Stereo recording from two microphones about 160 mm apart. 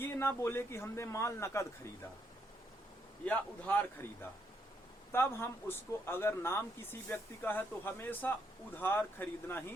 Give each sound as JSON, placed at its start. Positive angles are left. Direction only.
{"t": 0.0, "sound": "speech", "side_deg": 15}
{"t": 3.2, "sound": "speech", "side_deg": 10}